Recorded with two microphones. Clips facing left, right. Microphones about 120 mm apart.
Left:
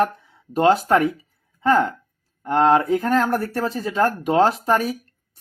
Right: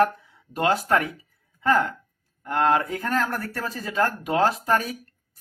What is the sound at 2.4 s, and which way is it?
Speech, 30° left (ahead or behind).